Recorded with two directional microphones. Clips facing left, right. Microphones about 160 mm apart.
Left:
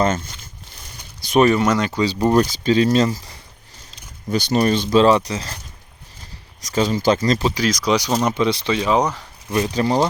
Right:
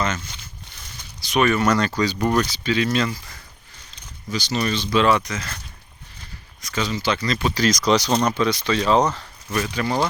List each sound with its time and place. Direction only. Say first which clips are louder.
0.0 s speech: left 6 dB; 45° left (ahead or behind)
1.2 s a sound: left 6 dB; 55° left (ahead or behind)
1.5 s speech: left 1 dB; 20° left (ahead or behind)
4.3 s speech: left 6 dB; 55° left (ahead or behind); by 5.5 s 35° left (ahead or behind)
6.6 s speech: left 6 dB; 40° left (ahead or behind)
7.5 s speech: even; 5° left (ahead or behind)
8.8 s speech: right 2 dB; 10° left (ahead or behind)
9.6 s speech: left 5 dB; 35° left (ahead or behind)